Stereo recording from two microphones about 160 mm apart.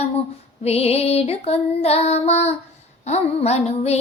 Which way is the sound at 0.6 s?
40° left (ahead or behind).